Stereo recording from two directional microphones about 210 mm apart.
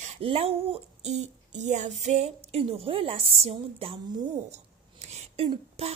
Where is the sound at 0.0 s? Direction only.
30° right (ahead or behind).